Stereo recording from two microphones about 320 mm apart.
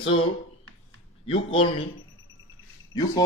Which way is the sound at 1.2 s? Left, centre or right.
Centre.